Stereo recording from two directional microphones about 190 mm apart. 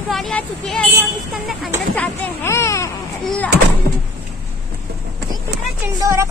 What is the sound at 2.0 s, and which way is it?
Speech, 15° left (ahead or behind).